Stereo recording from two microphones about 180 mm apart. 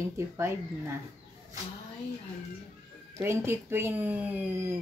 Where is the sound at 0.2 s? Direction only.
15° right (ahead or behind).